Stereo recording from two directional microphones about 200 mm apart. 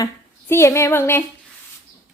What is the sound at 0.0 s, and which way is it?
Speech, 15° left (ahead or behind).